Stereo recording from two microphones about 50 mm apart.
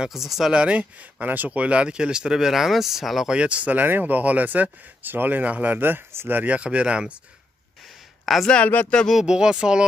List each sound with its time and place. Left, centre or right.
0.0 s speech: centre
0.5 s speech: centre
1.2 s speech: right; by 3.3 s centre
3.3 s speech: right
6.6 s speech: right
8.3 s speech: centre
9.2 s speech: centre